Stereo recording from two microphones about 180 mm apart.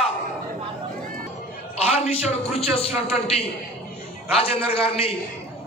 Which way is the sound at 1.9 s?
35° left (ahead or behind).